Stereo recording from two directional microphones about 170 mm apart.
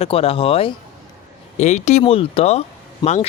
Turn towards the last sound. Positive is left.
turn(degrees=40)  # may be behind; listen again after turning